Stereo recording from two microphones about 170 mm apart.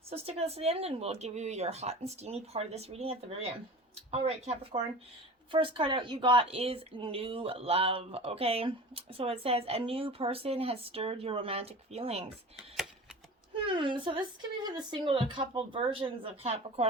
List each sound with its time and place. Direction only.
0.1 s a woman's voice: 35° right (ahead or behind)
13.7 s speech: 30° right (ahead or behind)